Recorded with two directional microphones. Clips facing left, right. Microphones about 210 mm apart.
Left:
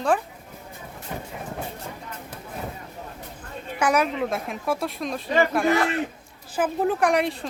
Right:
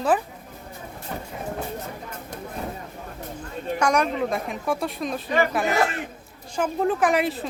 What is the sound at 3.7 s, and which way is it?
Speech, 5° left (ahead or behind).